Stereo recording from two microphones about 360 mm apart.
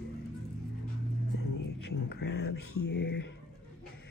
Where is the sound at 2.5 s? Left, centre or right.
Left.